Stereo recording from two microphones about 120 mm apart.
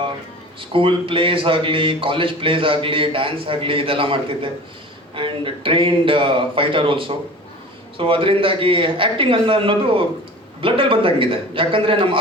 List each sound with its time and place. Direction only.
0.6 s a man's voice: 45° right (ahead or behind)